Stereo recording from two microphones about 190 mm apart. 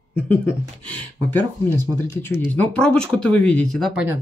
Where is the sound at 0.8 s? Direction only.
10° left (ahead or behind).